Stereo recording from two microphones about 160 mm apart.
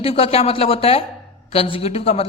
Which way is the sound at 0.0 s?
35° left (ahead or behind).